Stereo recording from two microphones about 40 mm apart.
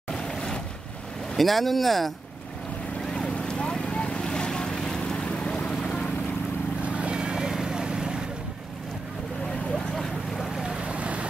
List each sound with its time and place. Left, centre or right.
0.3 s boat: centre
1.3 s speech: centre
3.1 s boat: left
6.8 s vehicle: right
10.3 s boat: centre
10.6 s boat: centre
11.0 s boat: right